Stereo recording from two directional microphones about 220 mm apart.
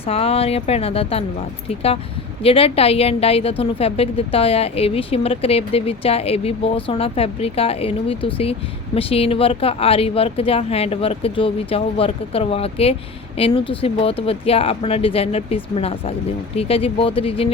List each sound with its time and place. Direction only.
0.0 s a woman's voice: 25° left (ahead or behind)
2.4 s a woman's voice: 25° left (ahead or behind)